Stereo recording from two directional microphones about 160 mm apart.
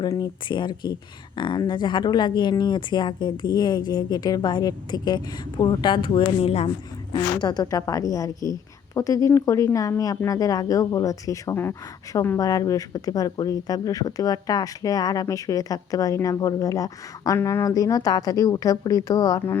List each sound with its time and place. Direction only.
0.0 s speech: 25° left (ahead or behind)
7.4 s speech: 25° left (ahead or behind)